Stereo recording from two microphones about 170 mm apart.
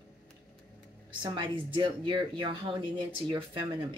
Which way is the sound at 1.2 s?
30° right (ahead or behind).